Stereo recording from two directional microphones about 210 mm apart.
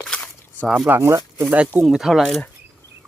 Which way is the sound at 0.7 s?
10° right (ahead or behind).